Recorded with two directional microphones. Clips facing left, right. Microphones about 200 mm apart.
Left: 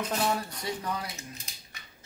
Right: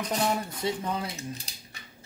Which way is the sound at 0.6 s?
25° right (ahead or behind).